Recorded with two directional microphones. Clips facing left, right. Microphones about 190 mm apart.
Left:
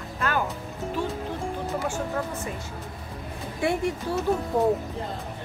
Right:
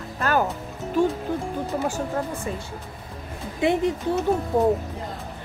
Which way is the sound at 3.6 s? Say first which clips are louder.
Right 4 dB; 20° right (ahead or behind).